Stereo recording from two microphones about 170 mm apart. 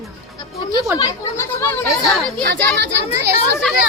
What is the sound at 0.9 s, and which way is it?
Speech, 20° left (ahead or behind).